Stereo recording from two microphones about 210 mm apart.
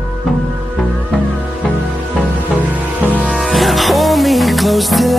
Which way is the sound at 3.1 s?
Centre (ahead or behind).